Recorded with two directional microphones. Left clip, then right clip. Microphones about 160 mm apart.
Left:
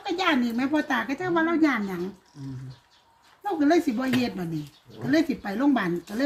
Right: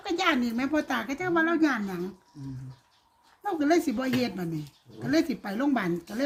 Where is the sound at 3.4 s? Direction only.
45° right (ahead or behind).